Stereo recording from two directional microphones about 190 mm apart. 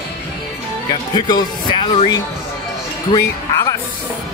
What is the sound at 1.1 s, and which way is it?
Speech, 20° left (ahead or behind).